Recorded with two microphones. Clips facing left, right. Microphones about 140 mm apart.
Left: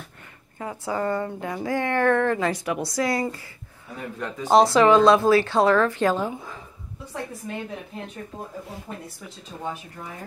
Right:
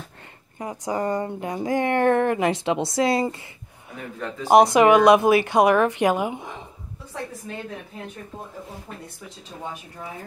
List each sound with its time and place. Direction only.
0.6 s a woman's voice: 20° right (ahead or behind)
4.5 s a woman's voice: 15° right (ahead or behind)